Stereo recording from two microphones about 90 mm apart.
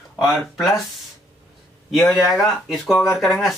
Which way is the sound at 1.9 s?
Centre (ahead or behind).